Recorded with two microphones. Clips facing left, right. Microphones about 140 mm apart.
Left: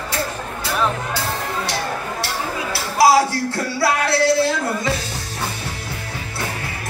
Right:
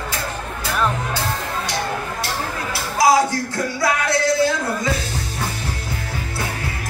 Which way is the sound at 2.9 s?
30° left (ahead or behind).